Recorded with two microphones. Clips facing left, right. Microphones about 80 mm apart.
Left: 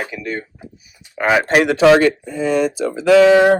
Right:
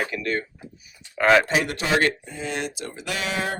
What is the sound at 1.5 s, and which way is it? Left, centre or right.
Speech, left.